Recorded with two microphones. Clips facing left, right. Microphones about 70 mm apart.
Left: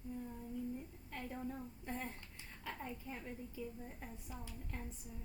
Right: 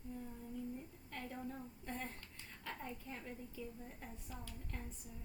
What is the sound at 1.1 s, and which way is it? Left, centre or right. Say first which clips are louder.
A woman's voice: left 2 dB; centre.